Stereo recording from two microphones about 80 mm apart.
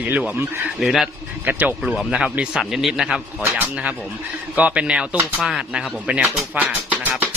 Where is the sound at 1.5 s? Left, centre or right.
Right.